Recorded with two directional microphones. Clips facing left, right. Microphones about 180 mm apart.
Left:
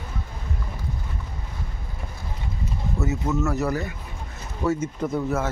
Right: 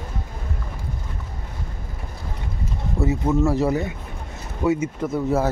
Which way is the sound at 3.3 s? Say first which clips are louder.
Right 5 dB; 30° right (ahead or behind).